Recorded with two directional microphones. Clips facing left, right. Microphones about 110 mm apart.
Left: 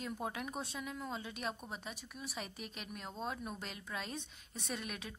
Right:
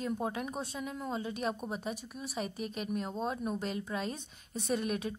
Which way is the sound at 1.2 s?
40° right (ahead or behind).